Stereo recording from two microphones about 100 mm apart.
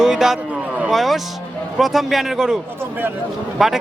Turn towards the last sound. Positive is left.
turn(degrees=-5)  # may be behind; listen again after turning